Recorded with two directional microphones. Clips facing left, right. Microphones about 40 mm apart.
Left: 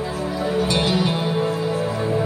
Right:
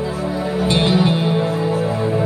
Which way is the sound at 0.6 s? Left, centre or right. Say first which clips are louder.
Right 4 dB; right.